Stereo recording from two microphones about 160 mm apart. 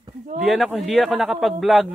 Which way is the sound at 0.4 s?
Centre (ahead or behind).